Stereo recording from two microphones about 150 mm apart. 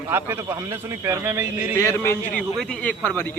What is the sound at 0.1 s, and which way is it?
A man's voice, 15° right (ahead or behind).